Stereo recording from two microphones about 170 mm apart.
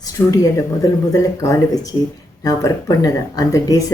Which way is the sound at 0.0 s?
20° left (ahead or behind).